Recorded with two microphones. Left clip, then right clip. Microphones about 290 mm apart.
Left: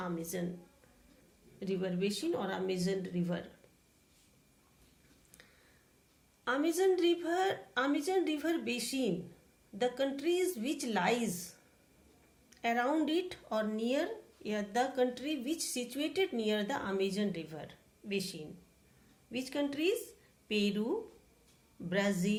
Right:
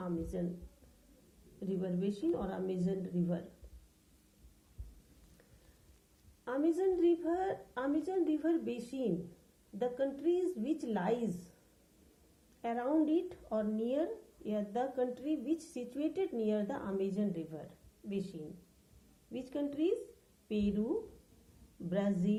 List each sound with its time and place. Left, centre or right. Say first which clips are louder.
0.0 s a sound: left 1 dB; centre
1.6 s speech: left 3 dB; centre
6.4 s speech: left 2 dB; centre
12.6 s speech: left 2 dB; centre
19.3 s speech: left 3 dB; centre
21.8 s speech: left 2 dB; centre